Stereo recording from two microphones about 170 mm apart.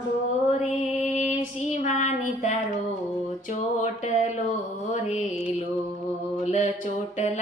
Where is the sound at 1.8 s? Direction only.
45° left (ahead or behind).